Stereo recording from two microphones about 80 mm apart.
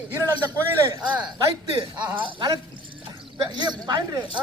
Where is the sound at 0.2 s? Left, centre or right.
Right.